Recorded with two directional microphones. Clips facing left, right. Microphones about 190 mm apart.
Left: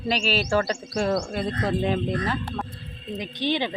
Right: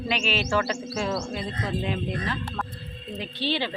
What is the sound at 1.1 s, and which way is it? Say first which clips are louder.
Speech: left 4 dB; 55° left (ahead or behind).